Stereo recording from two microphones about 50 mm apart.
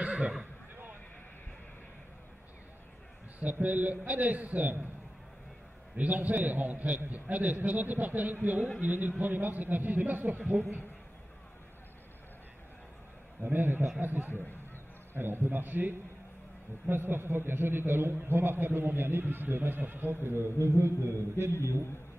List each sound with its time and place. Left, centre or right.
0.0 s neigh: right
3.3 s a man's voice: right
5.9 s a man's voice: right
13.4 s a man's voice: right
20.2 s a sound: right